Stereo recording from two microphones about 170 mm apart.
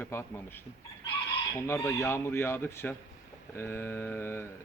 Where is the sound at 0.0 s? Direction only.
15° left (ahead or behind).